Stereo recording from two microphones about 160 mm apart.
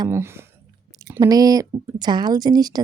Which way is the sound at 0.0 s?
15° right (ahead or behind).